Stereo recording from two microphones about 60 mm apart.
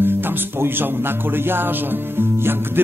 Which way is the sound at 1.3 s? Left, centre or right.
Right.